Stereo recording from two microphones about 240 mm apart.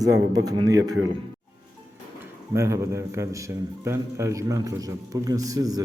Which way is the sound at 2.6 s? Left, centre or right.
Centre.